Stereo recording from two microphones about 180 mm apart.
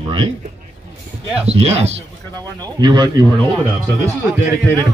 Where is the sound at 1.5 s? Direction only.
35° right (ahead or behind).